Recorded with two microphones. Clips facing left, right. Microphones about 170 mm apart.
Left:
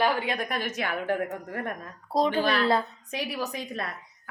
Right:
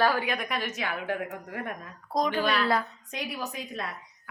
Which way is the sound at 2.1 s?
30° left (ahead or behind).